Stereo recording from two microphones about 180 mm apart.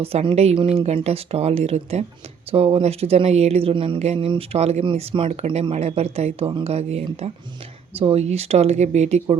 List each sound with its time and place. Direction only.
0.0 s speech: 35° right (ahead or behind)